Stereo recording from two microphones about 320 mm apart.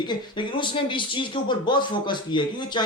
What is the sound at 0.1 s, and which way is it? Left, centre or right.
Speech, centre.